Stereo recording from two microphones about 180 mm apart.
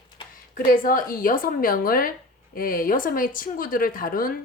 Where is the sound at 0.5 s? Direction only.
50° left (ahead or behind).